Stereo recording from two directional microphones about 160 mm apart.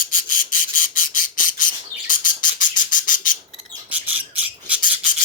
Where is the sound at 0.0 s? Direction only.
60° left (ahead or behind).